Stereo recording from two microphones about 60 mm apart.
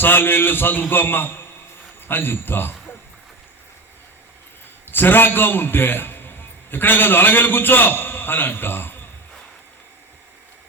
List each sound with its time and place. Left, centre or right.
0.0 s a man's voice: left
4.9 s a man's voice: left